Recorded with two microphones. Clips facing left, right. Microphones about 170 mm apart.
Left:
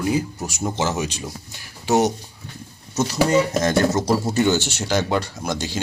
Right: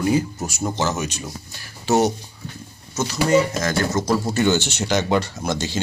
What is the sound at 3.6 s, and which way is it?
Speech, 20° left (ahead or behind).